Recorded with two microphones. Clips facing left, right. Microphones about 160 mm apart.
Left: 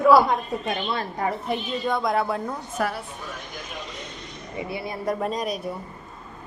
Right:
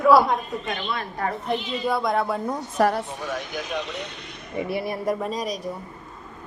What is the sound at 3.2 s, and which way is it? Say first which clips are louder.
Speech: right 7 dB; 85° right.